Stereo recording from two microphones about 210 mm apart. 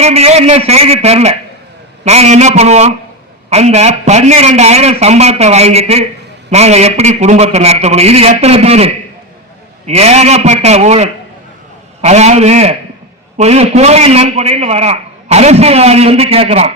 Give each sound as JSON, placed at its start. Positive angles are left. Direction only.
{"t": 0.0, "sound": "a man's voice", "side_deg": -30}